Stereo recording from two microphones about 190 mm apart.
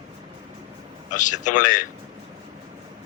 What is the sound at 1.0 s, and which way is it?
Speech, 40° left (ahead or behind).